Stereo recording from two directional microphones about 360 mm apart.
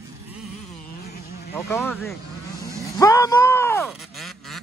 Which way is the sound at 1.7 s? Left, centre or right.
Centre.